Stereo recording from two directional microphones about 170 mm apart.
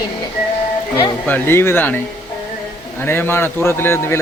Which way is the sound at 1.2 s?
10° left (ahead or behind).